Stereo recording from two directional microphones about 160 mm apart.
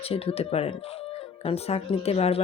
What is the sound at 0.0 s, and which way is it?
Speech, 35° left (ahead or behind).